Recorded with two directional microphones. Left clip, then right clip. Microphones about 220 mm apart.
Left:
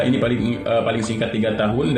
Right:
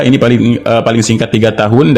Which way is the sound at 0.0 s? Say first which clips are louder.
Right 10 dB; 50° right (ahead or behind).